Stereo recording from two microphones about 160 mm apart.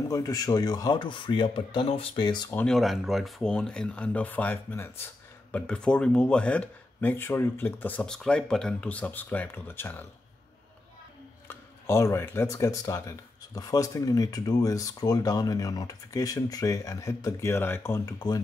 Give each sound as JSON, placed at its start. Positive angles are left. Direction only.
{"t": 0.1, "sound": "speech", "side_deg": 20}
{"t": 2.5, "sound": "speech", "side_deg": 5}
{"t": 11.4, "sound": "speech", "side_deg": 15}